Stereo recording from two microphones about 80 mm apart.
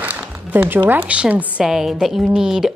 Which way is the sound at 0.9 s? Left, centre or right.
Centre.